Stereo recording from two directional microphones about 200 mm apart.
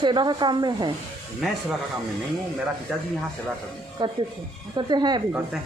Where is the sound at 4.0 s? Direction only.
20° right (ahead or behind).